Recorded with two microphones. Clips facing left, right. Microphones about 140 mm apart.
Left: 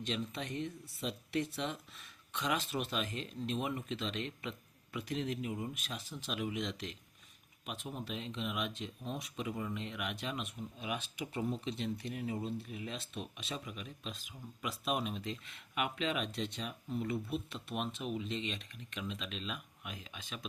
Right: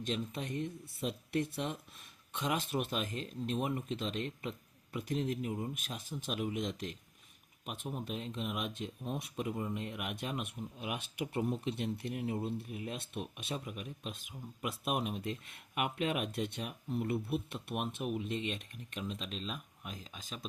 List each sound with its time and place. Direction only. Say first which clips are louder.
0.0 s speech: right 1 dB; 45° right (ahead or behind)